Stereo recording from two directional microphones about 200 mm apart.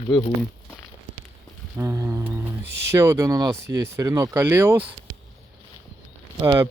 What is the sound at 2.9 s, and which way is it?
Speech, 15° right (ahead or behind).